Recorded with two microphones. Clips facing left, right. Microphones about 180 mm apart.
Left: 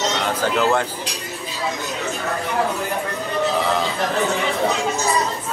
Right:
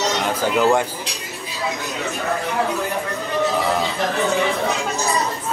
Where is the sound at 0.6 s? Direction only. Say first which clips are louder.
Right 3 dB; 10° right (ahead or behind).